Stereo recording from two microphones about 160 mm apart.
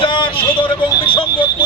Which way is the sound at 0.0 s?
30° left (ahead or behind).